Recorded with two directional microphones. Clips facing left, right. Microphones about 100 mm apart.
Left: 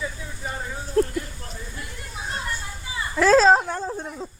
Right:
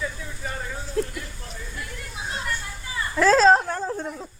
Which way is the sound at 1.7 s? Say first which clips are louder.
Right 1 dB; 20° left (ahead or behind).